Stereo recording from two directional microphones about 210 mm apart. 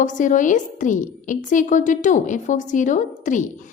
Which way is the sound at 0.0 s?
35° left (ahead or behind).